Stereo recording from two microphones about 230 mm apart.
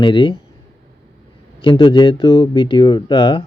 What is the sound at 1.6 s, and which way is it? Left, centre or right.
A man's voice, left.